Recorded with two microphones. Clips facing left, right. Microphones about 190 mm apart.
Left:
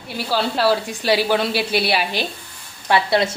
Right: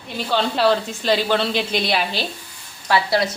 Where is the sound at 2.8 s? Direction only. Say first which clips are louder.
Left 1 dB; 25° left (ahead or behind).